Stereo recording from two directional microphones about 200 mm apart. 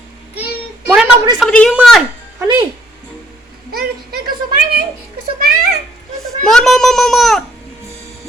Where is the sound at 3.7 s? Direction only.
50° right (ahead or behind).